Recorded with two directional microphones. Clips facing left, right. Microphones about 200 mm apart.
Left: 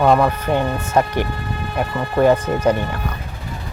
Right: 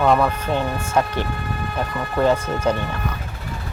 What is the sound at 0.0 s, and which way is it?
Speech, 15° left (ahead or behind).